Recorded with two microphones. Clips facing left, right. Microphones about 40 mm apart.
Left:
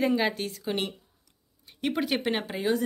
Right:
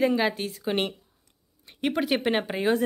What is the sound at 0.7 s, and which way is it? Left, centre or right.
Speech, centre.